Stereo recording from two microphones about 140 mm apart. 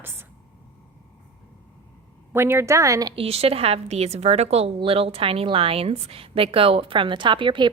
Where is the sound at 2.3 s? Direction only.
15° right (ahead or behind).